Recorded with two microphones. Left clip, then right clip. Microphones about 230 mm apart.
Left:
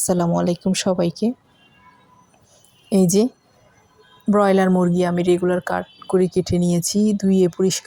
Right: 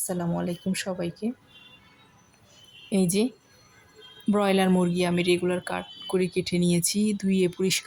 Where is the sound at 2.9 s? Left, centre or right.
Centre.